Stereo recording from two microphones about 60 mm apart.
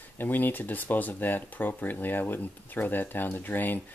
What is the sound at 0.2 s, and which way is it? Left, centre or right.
Speech, left.